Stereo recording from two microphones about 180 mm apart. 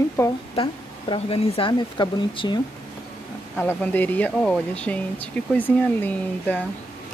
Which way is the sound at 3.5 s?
10° left (ahead or behind).